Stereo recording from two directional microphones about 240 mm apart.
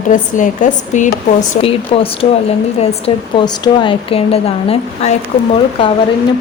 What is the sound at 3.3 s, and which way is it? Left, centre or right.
A woman's voice, centre.